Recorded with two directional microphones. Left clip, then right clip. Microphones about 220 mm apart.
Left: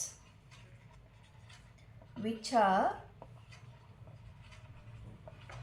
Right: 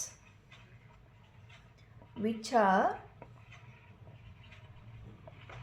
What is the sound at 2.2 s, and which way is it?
Speech, 50° right (ahead or behind).